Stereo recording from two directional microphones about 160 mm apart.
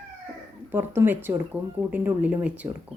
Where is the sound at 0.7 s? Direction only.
15° right (ahead or behind).